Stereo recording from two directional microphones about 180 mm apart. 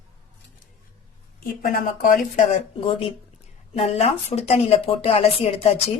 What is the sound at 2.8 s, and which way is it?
Speech, 30° left (ahead or behind).